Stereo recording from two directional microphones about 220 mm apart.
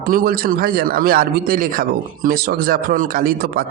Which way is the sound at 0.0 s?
40° right (ahead or behind).